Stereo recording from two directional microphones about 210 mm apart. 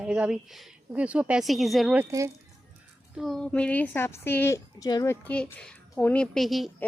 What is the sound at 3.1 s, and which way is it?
A woman's voice, centre (ahead or behind).